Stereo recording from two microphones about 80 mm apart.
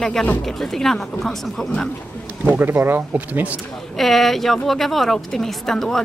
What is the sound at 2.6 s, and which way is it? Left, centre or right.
Speech, right.